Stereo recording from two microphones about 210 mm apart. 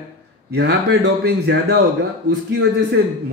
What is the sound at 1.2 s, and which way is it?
Speech, 50° right (ahead or behind).